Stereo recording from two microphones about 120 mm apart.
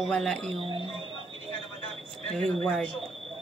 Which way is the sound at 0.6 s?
50° right (ahead or behind).